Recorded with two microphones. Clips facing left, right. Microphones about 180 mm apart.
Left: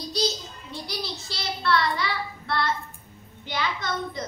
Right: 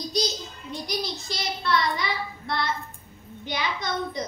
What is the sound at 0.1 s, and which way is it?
A child's voice, 15° right (ahead or behind).